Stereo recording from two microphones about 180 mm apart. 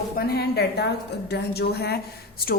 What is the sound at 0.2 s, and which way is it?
A woman's voice, 60° left (ahead or behind).